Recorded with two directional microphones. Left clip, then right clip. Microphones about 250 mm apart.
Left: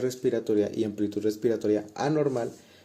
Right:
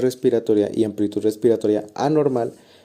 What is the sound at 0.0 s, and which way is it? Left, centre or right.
Speech, right.